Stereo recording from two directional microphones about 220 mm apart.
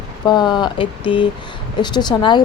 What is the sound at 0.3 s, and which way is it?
Speech, 20° left (ahead or behind).